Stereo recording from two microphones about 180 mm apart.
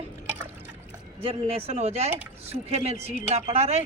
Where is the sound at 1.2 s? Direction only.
35° right (ahead or behind).